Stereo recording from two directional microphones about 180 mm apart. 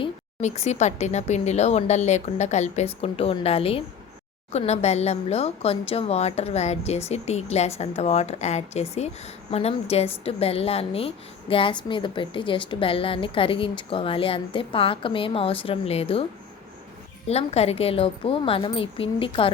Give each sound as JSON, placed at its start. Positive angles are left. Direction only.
{"t": 0.0, "sound": "a woman's voice", "side_deg": 35}
{"t": 17.2, "sound": "a woman's voice", "side_deg": 35}